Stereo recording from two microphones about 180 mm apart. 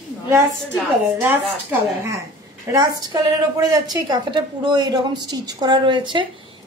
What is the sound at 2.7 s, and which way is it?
A child's voice, 20° right (ahead or behind).